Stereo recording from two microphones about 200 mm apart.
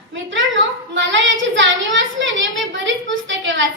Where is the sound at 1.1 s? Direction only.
70° right (ahead or behind).